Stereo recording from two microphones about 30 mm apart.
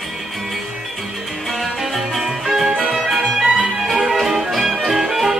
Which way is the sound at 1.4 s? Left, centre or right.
Centre.